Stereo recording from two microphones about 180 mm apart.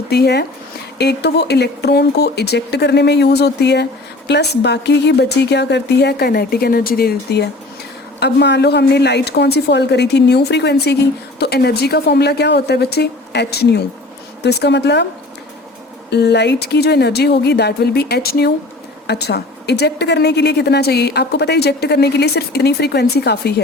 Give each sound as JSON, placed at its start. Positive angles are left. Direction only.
{"t": 0.1, "sound": "a woman's voice", "side_deg": 65}
{"t": 16.0, "sound": "a woman's voice", "side_deg": 70}